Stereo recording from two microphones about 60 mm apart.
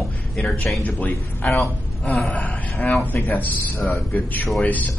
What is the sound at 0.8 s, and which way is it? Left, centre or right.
Speech, left.